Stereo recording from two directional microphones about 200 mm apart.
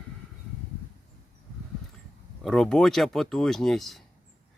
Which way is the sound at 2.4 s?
5° left (ahead or behind).